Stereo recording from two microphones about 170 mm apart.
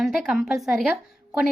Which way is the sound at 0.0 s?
5° right (ahead or behind).